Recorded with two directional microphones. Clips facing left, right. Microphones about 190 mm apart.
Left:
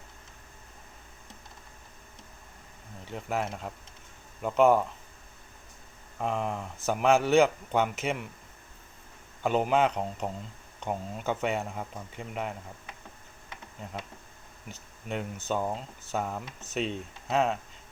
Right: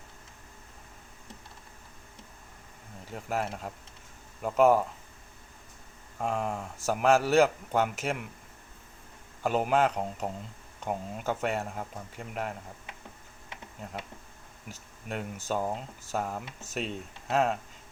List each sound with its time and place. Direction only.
3.1 s speech: 5° right (ahead or behind)
6.1 s speech: centre (ahead or behind)
9.4 s speech: 5° right (ahead or behind)
14.7 s speech: 5° right (ahead or behind)